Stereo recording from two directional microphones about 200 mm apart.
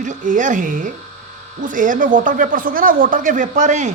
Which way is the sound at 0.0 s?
40° right (ahead or behind).